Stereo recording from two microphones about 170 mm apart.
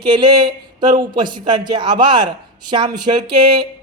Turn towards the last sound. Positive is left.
turn(degrees=-25)  # may be behind; listen again after turning